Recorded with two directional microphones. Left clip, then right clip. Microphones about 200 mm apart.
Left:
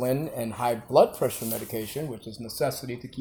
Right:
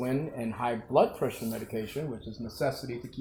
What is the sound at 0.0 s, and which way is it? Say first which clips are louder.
Speech: left 5 dB; 45° left (ahead or behind).